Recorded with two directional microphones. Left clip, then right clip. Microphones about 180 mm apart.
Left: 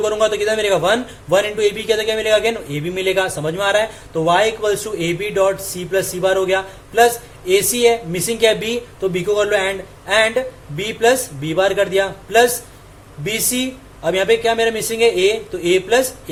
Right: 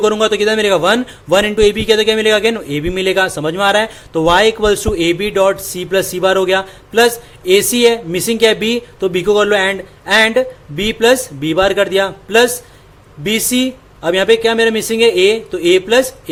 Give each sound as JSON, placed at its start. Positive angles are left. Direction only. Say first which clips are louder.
{"t": 0.0, "sound": "a man's voice", "louder": "right 4 dB", "side_deg": -45}